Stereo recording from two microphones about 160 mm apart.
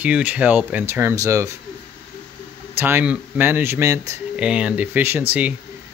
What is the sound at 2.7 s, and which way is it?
Speech, 15° right (ahead or behind).